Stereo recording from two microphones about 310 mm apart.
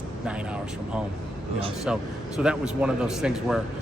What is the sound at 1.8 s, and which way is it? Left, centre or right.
Speech, centre.